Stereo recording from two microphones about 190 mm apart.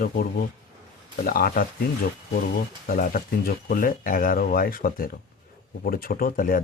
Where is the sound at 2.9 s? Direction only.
45° left (ahead or behind).